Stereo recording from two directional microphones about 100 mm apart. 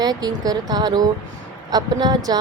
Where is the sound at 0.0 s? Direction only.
40° right (ahead or behind).